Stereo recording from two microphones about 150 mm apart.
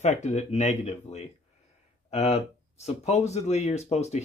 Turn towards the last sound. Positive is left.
turn(degrees=50)  # may be behind; listen again after turning